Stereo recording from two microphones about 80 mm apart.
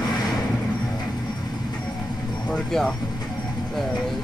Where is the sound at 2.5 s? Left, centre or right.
Centre.